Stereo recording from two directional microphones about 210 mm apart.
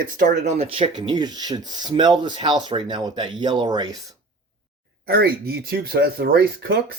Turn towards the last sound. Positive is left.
turn(degrees=-50)  # may be behind; listen again after turning